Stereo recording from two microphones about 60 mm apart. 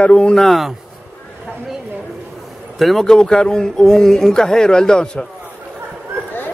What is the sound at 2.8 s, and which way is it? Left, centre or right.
Speech, centre.